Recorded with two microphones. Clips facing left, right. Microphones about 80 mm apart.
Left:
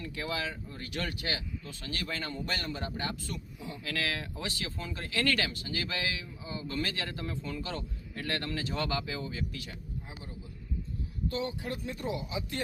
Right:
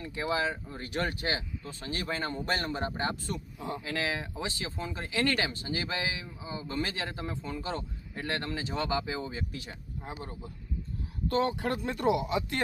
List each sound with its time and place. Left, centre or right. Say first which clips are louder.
0.0 s speech: right 5 dB; right
10.1 s a man's voice: right 5 dB; right
11.3 s speech: right 7 dB; right